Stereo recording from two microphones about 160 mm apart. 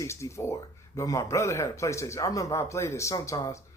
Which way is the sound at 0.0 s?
15° left (ahead or behind).